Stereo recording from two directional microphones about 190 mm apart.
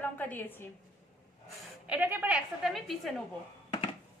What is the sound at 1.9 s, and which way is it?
A woman's voice, 10° right (ahead or behind).